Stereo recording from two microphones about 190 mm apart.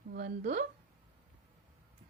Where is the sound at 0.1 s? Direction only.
55° right (ahead or behind).